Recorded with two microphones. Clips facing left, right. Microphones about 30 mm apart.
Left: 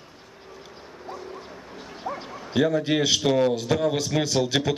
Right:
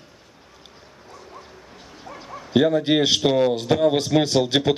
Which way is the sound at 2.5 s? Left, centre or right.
Right.